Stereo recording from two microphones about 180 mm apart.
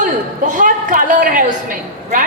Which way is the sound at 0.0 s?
45° right (ahead or behind).